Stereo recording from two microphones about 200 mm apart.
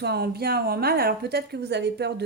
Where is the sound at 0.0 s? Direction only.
55° right (ahead or behind).